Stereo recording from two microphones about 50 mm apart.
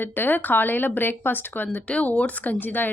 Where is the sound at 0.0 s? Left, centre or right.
Left.